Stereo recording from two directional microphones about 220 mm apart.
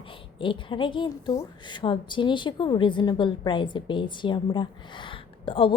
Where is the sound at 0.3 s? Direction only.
20° left (ahead or behind).